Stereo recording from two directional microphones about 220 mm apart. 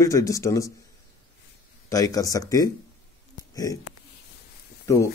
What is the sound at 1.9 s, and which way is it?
Speech, 15° left (ahead or behind).